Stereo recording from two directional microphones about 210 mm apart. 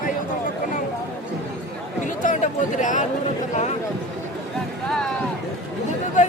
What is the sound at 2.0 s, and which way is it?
Speech, 35° left (ahead or behind).